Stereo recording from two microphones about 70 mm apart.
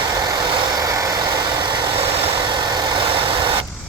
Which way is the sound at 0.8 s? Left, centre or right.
Right.